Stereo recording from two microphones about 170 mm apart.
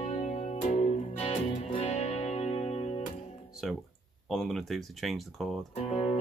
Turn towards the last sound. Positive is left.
turn(degrees=40)  # may be behind; listen again after turning